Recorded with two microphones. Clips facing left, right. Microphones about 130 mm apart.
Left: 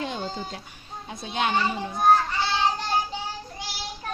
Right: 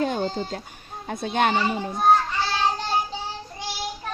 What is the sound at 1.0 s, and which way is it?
Speech, 55° right (ahead or behind).